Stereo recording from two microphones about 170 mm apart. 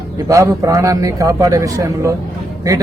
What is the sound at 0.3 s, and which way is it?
A man's voice, 20° right (ahead or behind).